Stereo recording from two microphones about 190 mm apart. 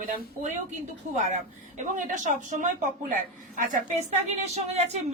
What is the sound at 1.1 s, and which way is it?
A woman's voice, 40° right (ahead or behind).